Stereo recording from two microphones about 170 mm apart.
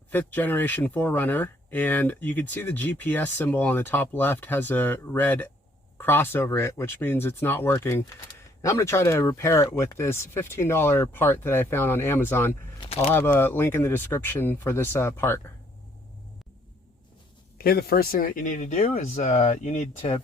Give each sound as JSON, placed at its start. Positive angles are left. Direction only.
{"t": 0.1, "sound": "speech", "side_deg": 10}
{"t": 12.8, "sound": "a sound", "side_deg": 35}
{"t": 13.1, "sound": "speech", "side_deg": 10}
{"t": 17.6, "sound": "speech", "side_deg": 65}